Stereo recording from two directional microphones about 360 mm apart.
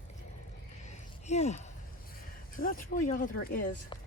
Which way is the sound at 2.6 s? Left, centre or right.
Left.